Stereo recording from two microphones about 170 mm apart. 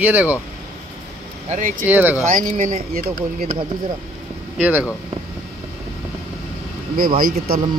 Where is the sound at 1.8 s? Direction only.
10° right (ahead or behind).